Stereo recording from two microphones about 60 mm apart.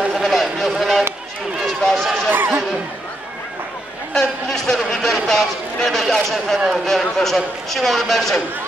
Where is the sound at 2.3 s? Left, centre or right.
Right.